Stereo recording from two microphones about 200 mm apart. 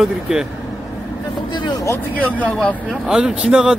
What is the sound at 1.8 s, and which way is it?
Speech, 10° left (ahead or behind).